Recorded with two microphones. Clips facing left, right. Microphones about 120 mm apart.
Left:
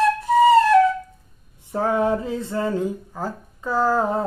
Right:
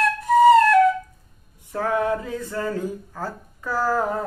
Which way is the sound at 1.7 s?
25° left (ahead or behind).